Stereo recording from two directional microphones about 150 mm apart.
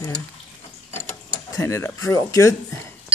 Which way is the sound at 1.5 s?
20° left (ahead or behind).